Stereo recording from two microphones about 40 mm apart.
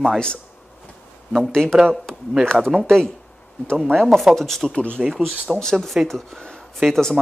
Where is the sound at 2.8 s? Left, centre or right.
Centre.